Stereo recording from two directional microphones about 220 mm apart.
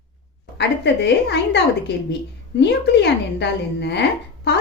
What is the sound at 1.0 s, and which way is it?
A woman's voice, 50° left (ahead or behind).